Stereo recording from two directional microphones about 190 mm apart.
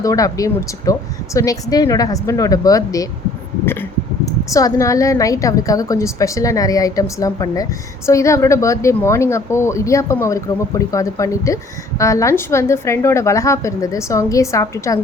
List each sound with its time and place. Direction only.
0.0 s a woman's voice: 20° left (ahead or behind)
4.3 s a woman's voice: 15° left (ahead or behind)